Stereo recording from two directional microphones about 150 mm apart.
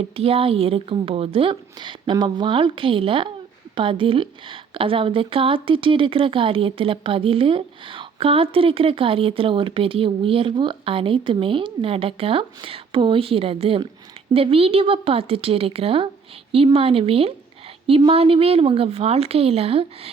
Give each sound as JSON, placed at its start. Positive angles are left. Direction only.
{"t": 0.2, "sound": "a woman's voice", "side_deg": -40}